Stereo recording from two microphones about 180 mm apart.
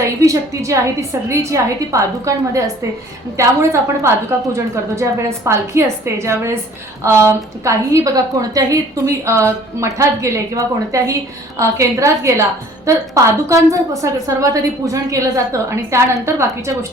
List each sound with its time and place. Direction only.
0.0 s a woman's voice: 15° right (ahead or behind)